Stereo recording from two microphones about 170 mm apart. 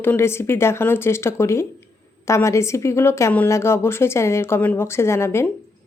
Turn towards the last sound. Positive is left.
turn(degrees=15)  # may be behind; listen again after turning